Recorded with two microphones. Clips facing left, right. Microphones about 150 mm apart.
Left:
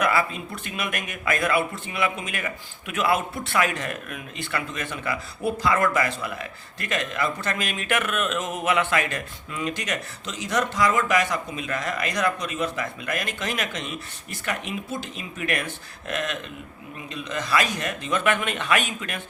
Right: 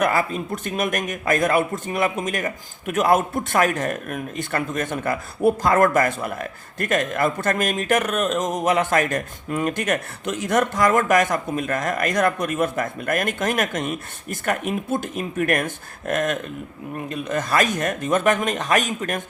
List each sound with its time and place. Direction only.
0.0 s a man's voice: 45° right (ahead or behind)